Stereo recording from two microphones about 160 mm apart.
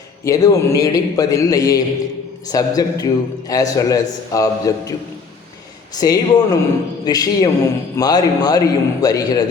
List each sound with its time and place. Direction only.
0.3 s a man's voice: 20° left (ahead or behind)
6.0 s a man's voice: 25° left (ahead or behind)